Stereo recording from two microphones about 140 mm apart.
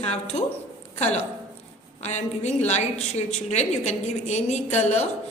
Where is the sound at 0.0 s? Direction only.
50° left (ahead or behind).